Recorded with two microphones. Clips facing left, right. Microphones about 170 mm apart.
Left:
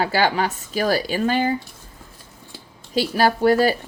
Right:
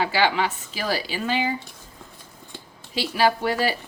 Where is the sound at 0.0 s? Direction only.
45° left (ahead or behind).